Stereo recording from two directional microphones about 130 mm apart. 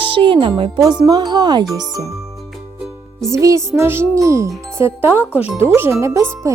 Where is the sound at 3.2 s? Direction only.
25° right (ahead or behind).